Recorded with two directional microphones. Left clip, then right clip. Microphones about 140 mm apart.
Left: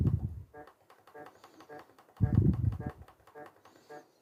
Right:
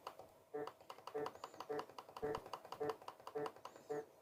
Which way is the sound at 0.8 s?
15° right (ahead or behind).